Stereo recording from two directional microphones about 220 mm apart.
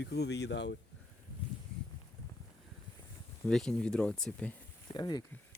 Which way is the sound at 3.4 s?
Centre (ahead or behind).